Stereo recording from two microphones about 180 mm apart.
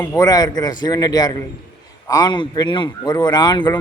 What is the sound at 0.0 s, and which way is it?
A man's voice, 20° left (ahead or behind).